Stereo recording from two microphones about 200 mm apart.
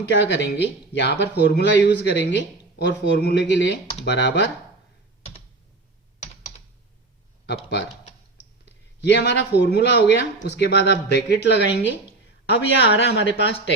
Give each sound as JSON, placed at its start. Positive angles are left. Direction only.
{"t": 0.1, "sound": "speech", "side_deg": 60}
{"t": 7.4, "sound": "speech", "side_deg": 60}
{"t": 9.0, "sound": "speech", "side_deg": 60}